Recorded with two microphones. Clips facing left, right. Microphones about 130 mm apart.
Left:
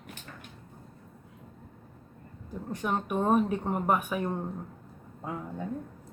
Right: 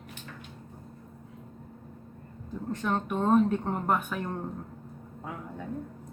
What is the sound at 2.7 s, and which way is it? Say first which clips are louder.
A woman's voice: even; 10° left (ahead or behind).